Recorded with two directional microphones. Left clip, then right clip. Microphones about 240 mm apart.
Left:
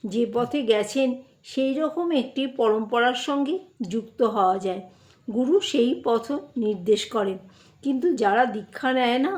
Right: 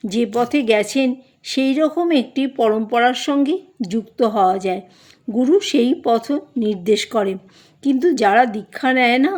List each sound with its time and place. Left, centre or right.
0.0 s a woman's voice: right